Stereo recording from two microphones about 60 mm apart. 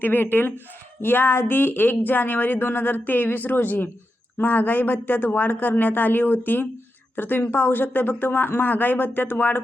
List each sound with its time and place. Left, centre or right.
0.0 s speech: left